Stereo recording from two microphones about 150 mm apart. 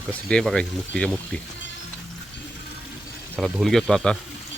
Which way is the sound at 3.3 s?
Centre (ahead or behind).